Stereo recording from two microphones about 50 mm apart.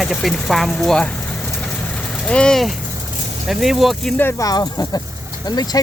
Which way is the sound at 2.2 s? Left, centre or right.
Centre.